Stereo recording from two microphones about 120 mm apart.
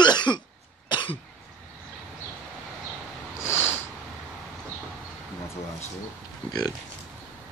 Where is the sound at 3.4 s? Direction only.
20° left (ahead or behind).